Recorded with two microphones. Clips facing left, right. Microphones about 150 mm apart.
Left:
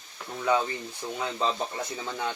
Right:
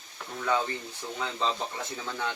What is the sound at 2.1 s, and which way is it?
Speech, 15° left (ahead or behind).